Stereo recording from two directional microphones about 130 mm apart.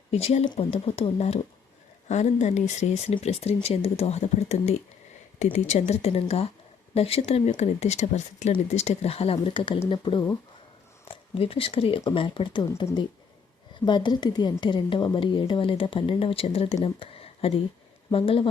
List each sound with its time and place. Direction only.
0.1 s a woman's voice: 55° left (ahead or behind)